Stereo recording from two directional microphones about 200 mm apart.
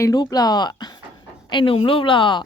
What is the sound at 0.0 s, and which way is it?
Speech, 20° left (ahead or behind).